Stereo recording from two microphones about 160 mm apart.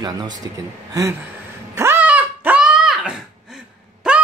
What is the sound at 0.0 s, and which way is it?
Speech, 25° right (ahead or behind).